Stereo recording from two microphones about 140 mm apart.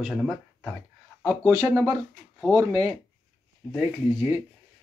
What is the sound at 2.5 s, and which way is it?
Speech, 25° right (ahead or behind).